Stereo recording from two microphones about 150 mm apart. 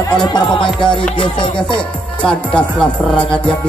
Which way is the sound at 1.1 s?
30° left (ahead or behind).